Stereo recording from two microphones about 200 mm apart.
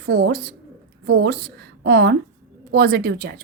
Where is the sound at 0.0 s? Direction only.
55° right (ahead or behind).